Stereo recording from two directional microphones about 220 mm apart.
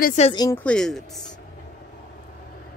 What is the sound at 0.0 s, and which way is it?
Speech, 30° left (ahead or behind).